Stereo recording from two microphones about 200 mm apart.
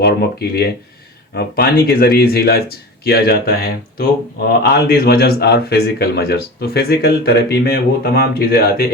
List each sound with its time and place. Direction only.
0.0 s speech: 50° left (ahead or behind)